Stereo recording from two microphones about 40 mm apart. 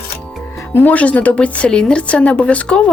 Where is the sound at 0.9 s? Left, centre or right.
Left.